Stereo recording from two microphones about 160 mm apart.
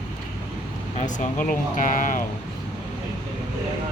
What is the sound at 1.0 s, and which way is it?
Speech, 50° left (ahead or behind).